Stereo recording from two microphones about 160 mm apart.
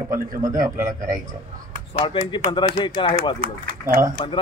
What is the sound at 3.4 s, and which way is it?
Speech, 65° right (ahead or behind).